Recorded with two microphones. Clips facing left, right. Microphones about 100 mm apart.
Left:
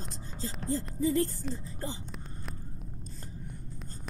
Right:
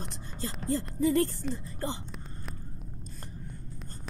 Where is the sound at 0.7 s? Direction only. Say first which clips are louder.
Right 2 dB; 85° right.